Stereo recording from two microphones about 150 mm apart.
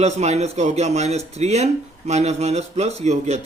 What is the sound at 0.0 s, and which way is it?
Speech, 45° right (ahead or behind).